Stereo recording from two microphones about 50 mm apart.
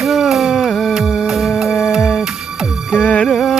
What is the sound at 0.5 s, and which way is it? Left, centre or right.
Music, centre.